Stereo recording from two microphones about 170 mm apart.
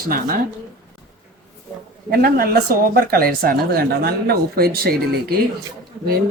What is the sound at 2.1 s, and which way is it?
Speech, 60° right (ahead or behind).